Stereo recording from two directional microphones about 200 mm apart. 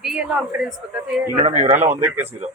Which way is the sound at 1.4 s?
35° right (ahead or behind).